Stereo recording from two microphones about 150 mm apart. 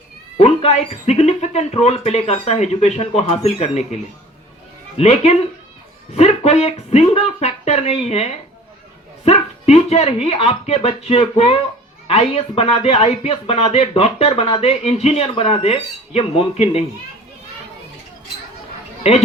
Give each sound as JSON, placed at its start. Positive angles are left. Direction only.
{"t": 0.3, "sound": "speech", "side_deg": 45}